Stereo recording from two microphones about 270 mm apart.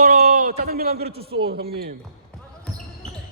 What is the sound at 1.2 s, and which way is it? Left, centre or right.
Speech, right.